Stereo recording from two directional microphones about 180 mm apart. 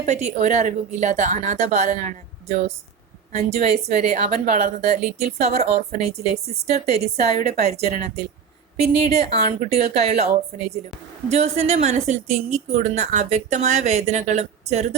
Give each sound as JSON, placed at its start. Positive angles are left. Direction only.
{"t": 0.0, "sound": "a woman's voice", "side_deg": -40}